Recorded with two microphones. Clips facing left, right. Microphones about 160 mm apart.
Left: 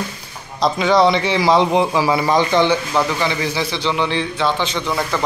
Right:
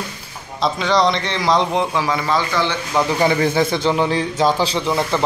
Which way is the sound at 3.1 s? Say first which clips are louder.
Right 4 dB; 45° right (ahead or behind).